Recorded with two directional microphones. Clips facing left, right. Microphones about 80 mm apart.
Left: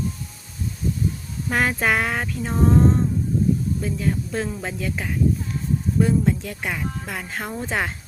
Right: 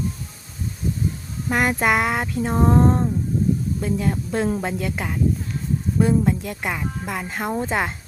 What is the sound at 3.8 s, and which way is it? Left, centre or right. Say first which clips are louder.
Speech: right 2 dB; right.